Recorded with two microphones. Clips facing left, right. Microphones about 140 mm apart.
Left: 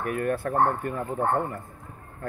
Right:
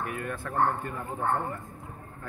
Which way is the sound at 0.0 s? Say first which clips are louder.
Left 7 dB; 60° left (ahead or behind).